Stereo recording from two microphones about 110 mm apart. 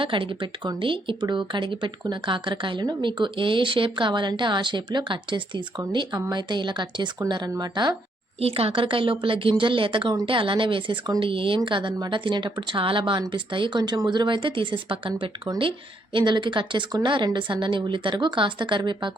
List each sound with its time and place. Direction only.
0.0 s speech: 50° right (ahead or behind)
8.4 s speech: 65° right (ahead or behind); by 19.1 s 45° right (ahead or behind)